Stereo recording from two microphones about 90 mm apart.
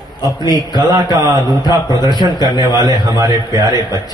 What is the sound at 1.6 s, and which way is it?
Speech, 50° left (ahead or behind).